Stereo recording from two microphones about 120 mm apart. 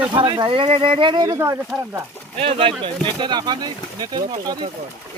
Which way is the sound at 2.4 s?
50° right (ahead or behind).